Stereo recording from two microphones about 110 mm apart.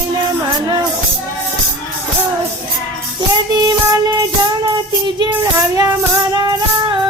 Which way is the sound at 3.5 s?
35° right (ahead or behind).